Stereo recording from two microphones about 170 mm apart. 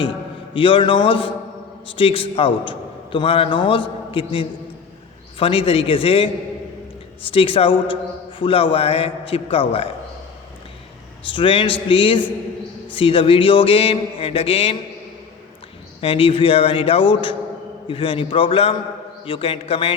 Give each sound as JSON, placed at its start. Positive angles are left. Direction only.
{"t": 0.5, "sound": "a man's voice", "side_deg": 30}
{"t": 11.3, "sound": "a man's voice", "side_deg": 30}
{"t": 16.0, "sound": "a man's voice", "side_deg": 35}